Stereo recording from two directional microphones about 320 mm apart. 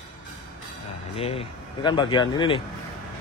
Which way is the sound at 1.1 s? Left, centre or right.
Centre.